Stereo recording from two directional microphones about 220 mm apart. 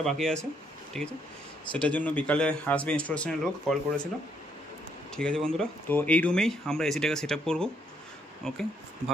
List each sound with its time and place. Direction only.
0.0 s speech: centre (ahead or behind)
5.1 s speech: 5° left (ahead or behind)